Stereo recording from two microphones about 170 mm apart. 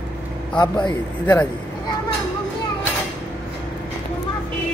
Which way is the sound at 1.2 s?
10° left (ahead or behind).